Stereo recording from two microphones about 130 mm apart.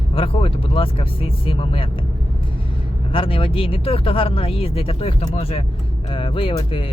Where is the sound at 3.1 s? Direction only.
45° left (ahead or behind).